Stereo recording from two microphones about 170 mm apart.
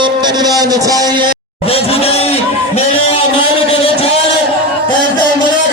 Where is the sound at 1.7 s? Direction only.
35° left (ahead or behind).